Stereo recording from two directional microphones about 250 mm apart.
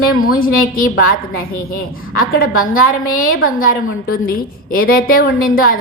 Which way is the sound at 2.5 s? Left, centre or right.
Left.